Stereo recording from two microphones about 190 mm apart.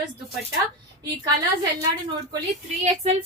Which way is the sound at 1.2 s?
20° right (ahead or behind).